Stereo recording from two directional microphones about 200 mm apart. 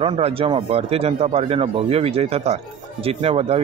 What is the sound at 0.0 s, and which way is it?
A man's voice, 25° right (ahead or behind).